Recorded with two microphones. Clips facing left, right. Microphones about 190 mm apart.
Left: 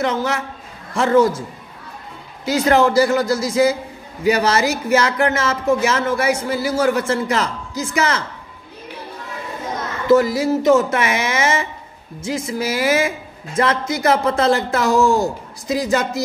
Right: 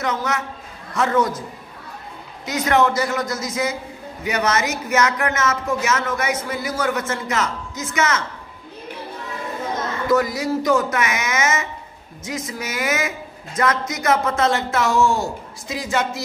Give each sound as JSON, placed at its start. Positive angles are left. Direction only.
{"t": 0.0, "sound": "speech", "side_deg": 30}
{"t": 2.4, "sound": "speech", "side_deg": 30}
{"t": 10.0, "sound": "speech", "side_deg": 25}